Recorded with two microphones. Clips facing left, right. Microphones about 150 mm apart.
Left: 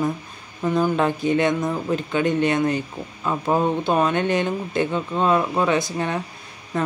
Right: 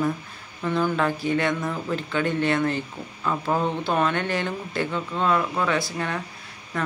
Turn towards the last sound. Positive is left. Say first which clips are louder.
# left 4 dB
turn(degrees=25)  # may be behind; listen again after turning